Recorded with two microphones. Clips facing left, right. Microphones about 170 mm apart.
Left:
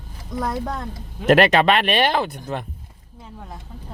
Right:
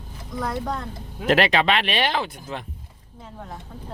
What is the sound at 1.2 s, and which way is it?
Speech, 50° left (ahead or behind).